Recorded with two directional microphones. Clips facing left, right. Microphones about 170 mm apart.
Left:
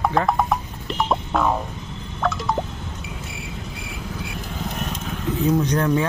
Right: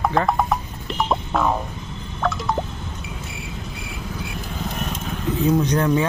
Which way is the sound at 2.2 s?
Centre (ahead or behind).